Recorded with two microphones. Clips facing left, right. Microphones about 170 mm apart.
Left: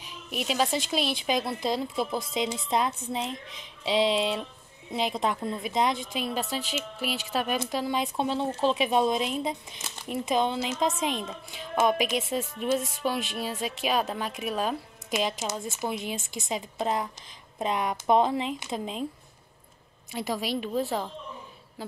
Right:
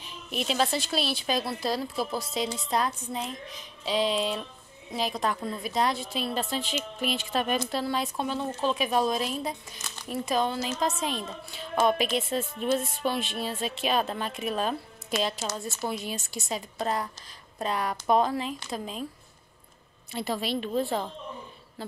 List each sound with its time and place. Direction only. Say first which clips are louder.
0.0 s a woman's voice: right 1 dB; 10° left (ahead or behind)
20.1 s speech: even; 10° left (ahead or behind)